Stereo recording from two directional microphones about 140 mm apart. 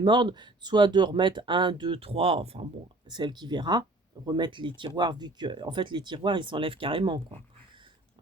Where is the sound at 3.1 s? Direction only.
30° right (ahead or behind).